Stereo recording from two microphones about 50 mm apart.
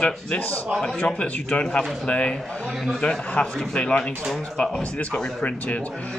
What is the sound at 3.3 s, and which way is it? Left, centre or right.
Speech, left.